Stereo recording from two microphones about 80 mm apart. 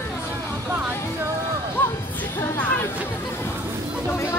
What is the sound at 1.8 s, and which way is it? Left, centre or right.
Music, left.